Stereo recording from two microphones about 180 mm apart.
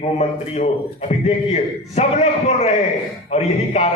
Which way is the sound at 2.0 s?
40° left (ahead or behind).